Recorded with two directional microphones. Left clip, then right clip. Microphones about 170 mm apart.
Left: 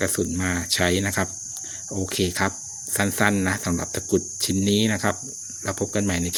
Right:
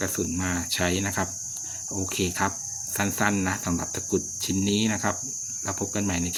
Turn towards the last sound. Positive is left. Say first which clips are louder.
# left 3 dB
turn(degrees=35)  # may be behind; listen again after turning